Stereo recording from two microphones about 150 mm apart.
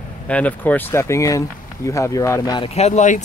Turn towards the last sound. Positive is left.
turn(degrees=50)  # may be behind; listen again after turning